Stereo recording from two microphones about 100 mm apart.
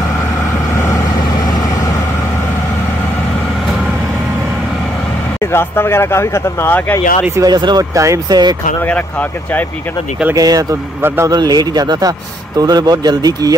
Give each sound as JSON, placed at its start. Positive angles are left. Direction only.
{"t": 5.5, "sound": "speech", "side_deg": 25}
{"t": 7.4, "sound": "speech", "side_deg": -45}
{"t": 7.9, "sound": "speech", "side_deg": -35}
{"t": 10.3, "sound": "speech", "side_deg": -35}
{"t": 11.0, "sound": "a man's voice", "side_deg": -25}
{"t": 11.2, "sound": "speech", "side_deg": -45}